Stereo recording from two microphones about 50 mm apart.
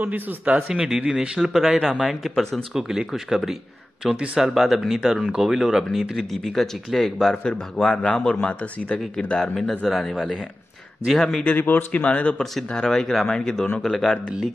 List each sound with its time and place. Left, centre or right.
0.0 s a man's voice: right
0.7 s speech: centre
1.4 s speech: centre
2.7 s speech: centre
5.9 s speech: centre
7.4 s speech: centre
11.5 s speech: left
12.0 s speech: left
12.4 s speech: centre